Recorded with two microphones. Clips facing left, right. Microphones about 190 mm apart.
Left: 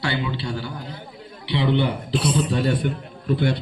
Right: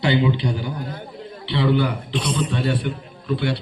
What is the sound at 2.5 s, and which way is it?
A man's voice, 40° left (ahead or behind).